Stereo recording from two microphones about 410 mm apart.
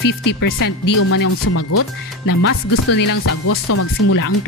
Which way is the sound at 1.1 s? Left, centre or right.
Left.